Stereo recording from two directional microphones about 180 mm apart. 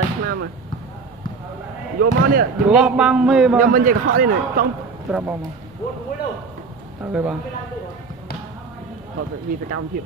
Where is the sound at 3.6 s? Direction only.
50° right (ahead or behind).